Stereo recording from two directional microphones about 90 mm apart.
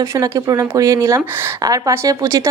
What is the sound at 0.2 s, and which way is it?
A woman's voice, 40° right (ahead or behind).